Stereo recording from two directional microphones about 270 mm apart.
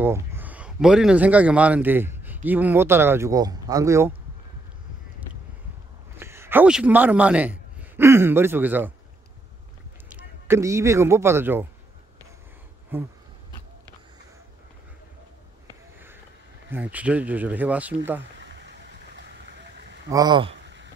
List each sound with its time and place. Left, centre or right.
0.0 s speech: centre
6.1 s a man's voice: centre
10.1 s speech: centre
12.9 s speech: centre
16.7 s speech: centre
18.4 s a sound: right
20.1 s speech: centre
20.6 s a sound: right